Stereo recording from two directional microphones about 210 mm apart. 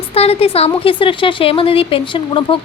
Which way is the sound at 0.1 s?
30° left (ahead or behind).